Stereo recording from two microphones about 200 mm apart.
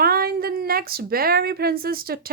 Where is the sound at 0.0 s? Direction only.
50° right (ahead or behind).